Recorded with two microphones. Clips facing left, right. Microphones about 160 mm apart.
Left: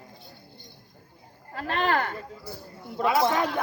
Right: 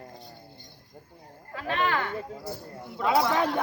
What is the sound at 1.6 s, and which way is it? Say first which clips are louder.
Speech: left 2 dB; 40° left (ahead or behind).